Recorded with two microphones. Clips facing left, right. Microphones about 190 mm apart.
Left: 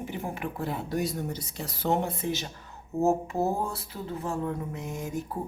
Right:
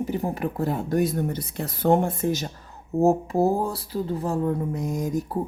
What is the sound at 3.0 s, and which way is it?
Speech, 35° right (ahead or behind).